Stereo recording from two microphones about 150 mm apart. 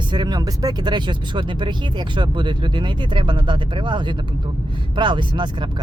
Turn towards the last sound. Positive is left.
turn(degrees=-30)  # may be behind; listen again after turning